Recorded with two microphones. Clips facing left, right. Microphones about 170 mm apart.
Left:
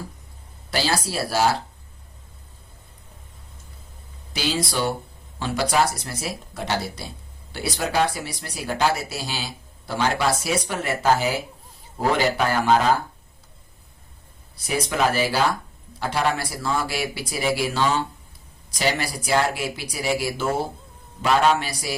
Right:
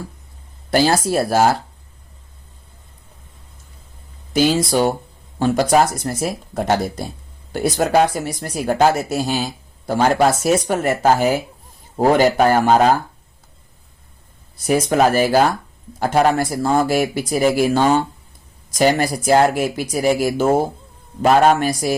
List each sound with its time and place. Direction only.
0.7 s speech: 50° right (ahead or behind)
4.3 s speech: 50° right (ahead or behind)
14.6 s speech: 50° right (ahead or behind)